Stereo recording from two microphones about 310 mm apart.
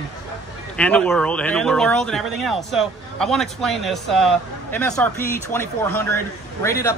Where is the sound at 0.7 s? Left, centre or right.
Centre.